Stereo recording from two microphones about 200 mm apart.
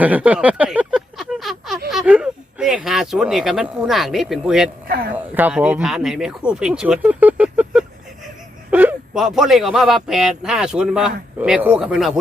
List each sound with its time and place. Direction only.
0.0 s a sound: 5° right (ahead or behind)
1.9 s speech: 5° right (ahead or behind)
4.9 s speech: 50° right (ahead or behind)
5.1 s a man's voice: 10° right (ahead or behind)